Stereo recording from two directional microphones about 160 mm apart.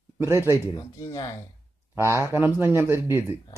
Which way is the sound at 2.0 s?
15° right (ahead or behind).